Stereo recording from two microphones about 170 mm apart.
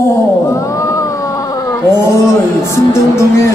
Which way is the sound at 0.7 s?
20° left (ahead or behind).